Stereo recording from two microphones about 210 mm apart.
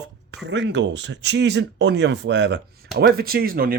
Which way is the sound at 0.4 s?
60° right (ahead or behind).